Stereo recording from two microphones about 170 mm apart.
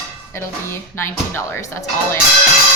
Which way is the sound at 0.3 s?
15° left (ahead or behind).